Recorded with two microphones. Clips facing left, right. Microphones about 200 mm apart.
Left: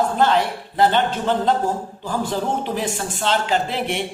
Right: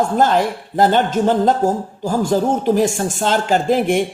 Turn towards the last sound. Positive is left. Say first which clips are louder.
# right 7 dB
turn(degrees=-45)  # may be behind; listen again after turning